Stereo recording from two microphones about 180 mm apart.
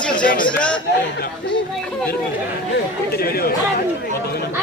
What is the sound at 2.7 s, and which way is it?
Chatter, 60° left (ahead or behind).